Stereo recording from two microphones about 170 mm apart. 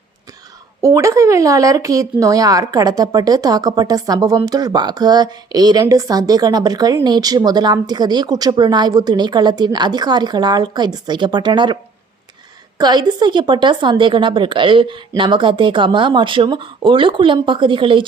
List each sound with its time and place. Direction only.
0.8 s speech: 20° right (ahead or behind)
12.8 s speech: 25° right (ahead or behind)